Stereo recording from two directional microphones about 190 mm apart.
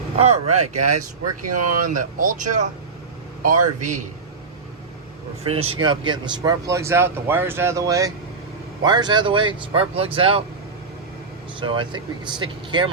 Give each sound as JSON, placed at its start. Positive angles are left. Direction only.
{"t": 0.2, "sound": "speech", "side_deg": -35}
{"t": 5.5, "sound": "speech", "side_deg": -30}
{"t": 11.6, "sound": "speech", "side_deg": -25}